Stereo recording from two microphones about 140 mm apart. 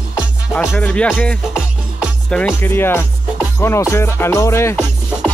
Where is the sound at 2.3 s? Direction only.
5° left (ahead or behind).